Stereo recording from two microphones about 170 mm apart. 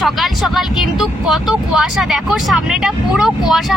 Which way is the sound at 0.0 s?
Centre (ahead or behind).